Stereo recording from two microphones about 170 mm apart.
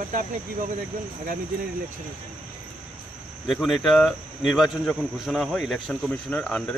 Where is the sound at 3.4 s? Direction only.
Centre (ahead or behind).